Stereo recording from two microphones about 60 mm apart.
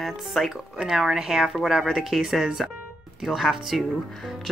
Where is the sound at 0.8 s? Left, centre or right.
Centre.